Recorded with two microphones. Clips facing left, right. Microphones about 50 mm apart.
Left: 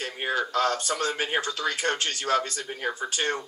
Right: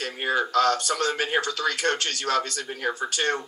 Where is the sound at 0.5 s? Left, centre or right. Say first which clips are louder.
Right 3 dB; left.